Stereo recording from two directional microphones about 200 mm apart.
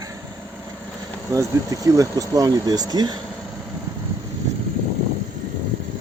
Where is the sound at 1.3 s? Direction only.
15° right (ahead or behind).